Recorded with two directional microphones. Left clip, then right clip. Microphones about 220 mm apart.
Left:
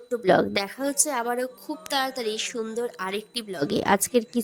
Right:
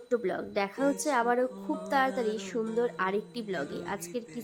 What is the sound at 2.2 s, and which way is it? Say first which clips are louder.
Speech: left 3 dB; 40° left (ahead or behind).